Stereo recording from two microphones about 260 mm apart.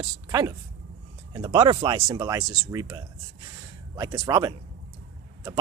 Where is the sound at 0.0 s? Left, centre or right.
Centre.